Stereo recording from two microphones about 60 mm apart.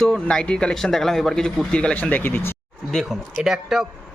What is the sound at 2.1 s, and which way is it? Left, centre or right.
Speech, left.